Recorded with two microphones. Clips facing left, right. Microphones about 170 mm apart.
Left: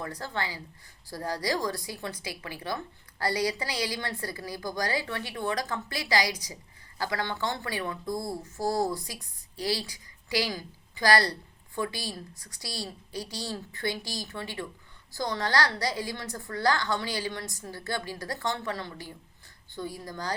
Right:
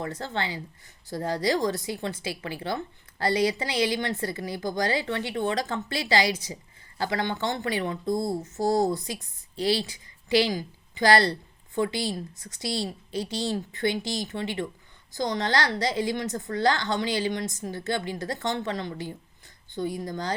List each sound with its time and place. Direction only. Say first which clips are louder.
0.0 s speech: right 3 dB; 25° right (ahead or behind)